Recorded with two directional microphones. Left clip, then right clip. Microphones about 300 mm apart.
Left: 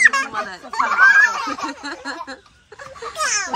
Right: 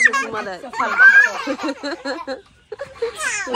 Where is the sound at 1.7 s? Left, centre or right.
Centre.